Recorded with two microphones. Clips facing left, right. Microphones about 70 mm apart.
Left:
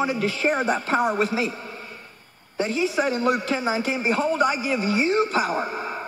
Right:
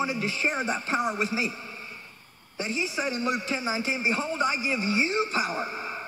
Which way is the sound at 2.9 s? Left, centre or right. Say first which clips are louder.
Left 6 dB; left.